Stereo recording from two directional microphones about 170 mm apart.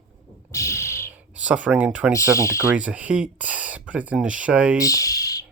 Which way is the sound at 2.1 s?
20° left (ahead or behind).